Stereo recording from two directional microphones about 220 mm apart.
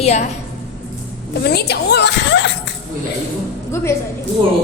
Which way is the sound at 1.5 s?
45° left (ahead or behind).